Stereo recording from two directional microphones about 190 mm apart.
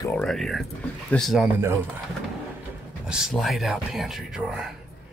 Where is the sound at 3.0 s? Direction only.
5° right (ahead or behind).